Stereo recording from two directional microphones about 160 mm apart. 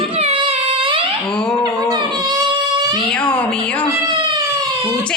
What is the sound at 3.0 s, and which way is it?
Cat, 5° left (ahead or behind).